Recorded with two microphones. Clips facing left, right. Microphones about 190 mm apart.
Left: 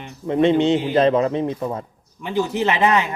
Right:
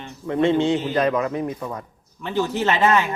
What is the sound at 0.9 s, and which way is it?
Speech, 25° left (ahead or behind).